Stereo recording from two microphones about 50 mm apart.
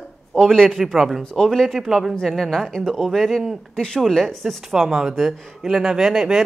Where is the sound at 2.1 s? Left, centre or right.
Centre.